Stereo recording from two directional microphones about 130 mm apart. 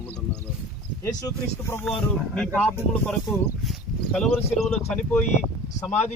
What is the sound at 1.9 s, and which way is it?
Speech, 5° left (ahead or behind).